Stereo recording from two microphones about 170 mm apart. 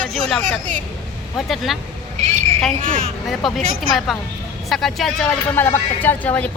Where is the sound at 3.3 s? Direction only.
Centre (ahead or behind).